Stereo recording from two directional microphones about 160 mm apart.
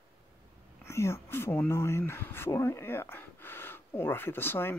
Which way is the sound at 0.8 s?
15° left (ahead or behind).